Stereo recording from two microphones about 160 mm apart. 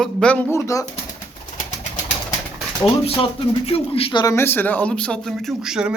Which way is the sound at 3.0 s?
35° left (ahead or behind).